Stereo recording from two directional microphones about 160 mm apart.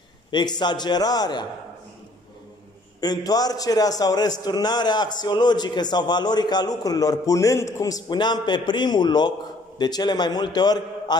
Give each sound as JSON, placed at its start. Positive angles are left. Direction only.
{"t": 0.3, "sound": "a man's voice", "side_deg": 30}
{"t": 3.0, "sound": "a man's voice", "side_deg": 25}